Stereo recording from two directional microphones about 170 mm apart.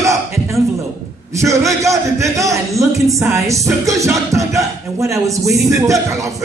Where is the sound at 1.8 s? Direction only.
20° right (ahead or behind).